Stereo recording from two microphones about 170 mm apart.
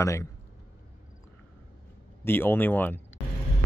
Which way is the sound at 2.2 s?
15° left (ahead or behind).